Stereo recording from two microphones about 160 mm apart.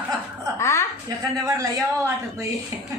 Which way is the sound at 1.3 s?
20° right (ahead or behind).